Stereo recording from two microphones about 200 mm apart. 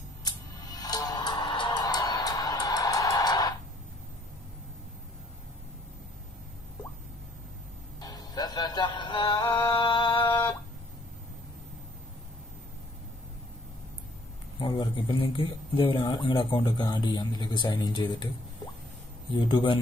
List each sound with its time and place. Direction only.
0.2 s music: 20° left (ahead or behind)
8.0 s music: 20° left (ahead or behind)
14.6 s a man's voice: 20° left (ahead or behind)
19.3 s a man's voice: 25° left (ahead or behind)